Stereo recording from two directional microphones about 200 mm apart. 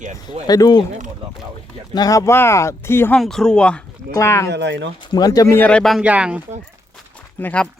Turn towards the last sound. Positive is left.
turn(degrees=5)  # may be behind; listen again after turning